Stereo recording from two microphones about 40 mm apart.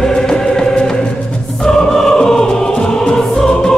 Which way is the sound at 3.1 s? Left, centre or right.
Centre.